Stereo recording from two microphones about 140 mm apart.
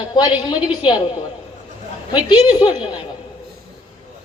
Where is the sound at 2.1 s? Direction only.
35° left (ahead or behind).